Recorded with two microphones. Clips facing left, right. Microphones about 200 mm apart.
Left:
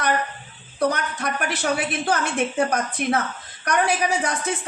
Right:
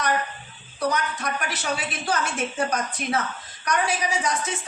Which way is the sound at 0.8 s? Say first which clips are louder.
Left 3 dB; 55° left (ahead or behind).